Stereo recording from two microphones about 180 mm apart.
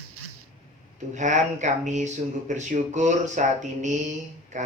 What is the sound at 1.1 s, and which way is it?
Speech, 45° right (ahead or behind).